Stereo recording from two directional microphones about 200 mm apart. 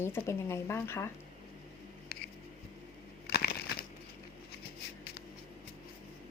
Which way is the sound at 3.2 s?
50° left (ahead or behind).